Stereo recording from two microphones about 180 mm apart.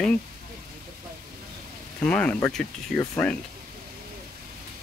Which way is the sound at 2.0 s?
5° left (ahead or behind).